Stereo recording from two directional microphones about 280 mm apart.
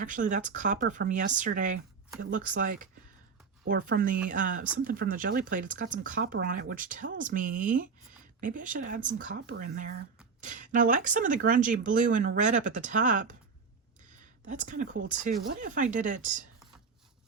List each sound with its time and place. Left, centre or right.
0.0 s speech: right
14.4 s speech: right